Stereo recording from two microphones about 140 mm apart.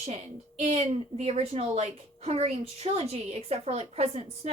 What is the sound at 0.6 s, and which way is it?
A woman's voice, 50° right (ahead or behind).